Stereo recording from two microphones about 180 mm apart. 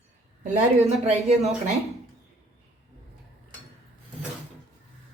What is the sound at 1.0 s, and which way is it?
Speech, 40° right (ahead or behind).